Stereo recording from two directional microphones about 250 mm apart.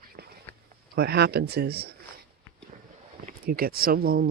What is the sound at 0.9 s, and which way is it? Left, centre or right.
Speech, right.